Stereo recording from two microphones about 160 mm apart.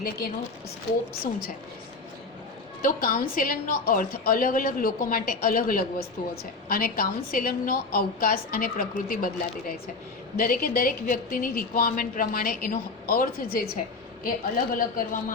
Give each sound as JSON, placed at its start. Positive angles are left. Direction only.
{"t": 2.8, "sound": "a woman's voice", "side_deg": 65}
{"t": 10.3, "sound": "a woman's voice", "side_deg": 65}